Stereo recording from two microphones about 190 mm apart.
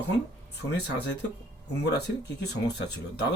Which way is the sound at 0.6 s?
65° left (ahead or behind).